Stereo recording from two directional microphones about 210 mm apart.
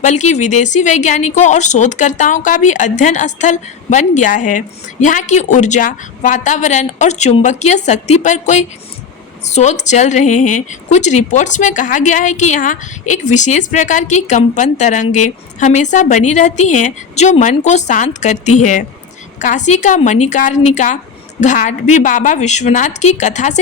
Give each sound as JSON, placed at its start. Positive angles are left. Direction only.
{"t": 0.0, "sound": "a woman's voice", "side_deg": 35}